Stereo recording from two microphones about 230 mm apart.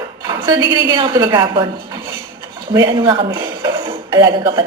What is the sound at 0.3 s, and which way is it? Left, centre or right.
A woman's voice, centre.